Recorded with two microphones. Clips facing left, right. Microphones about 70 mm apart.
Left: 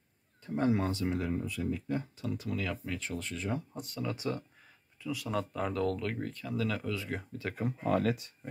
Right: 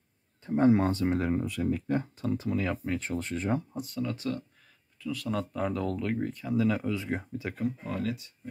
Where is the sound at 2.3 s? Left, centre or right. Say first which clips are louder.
Right 6 dB; right.